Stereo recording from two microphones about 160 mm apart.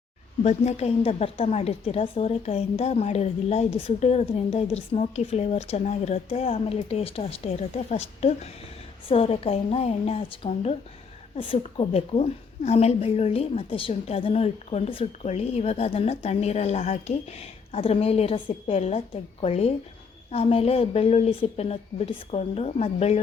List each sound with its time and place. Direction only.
0.4 s a woman's voice: 45° left (ahead or behind)